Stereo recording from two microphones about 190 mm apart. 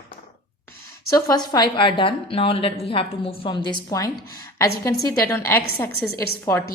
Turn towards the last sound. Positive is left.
turn(degrees=15)  # may be behind; listen again after turning